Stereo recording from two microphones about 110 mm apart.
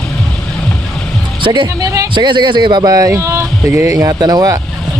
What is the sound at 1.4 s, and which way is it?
Speech, 45° right (ahead or behind).